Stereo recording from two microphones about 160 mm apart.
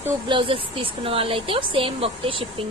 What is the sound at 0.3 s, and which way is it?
A woman's voice, 30° right (ahead or behind).